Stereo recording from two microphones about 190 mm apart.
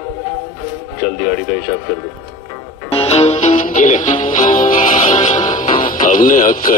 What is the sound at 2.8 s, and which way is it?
Music, 30° left (ahead or behind).